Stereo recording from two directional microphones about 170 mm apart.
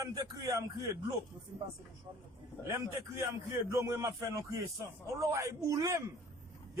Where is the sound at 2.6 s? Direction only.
15° right (ahead or behind).